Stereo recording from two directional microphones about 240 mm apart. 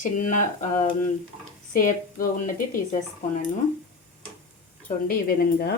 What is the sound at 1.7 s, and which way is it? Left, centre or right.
Speech, left.